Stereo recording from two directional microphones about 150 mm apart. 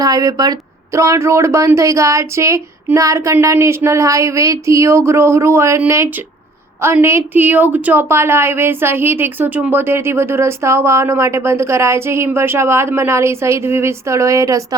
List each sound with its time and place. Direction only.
0.0 s speech: 25° right (ahead or behind)
6.8 s a woman's voice: 15° right (ahead or behind)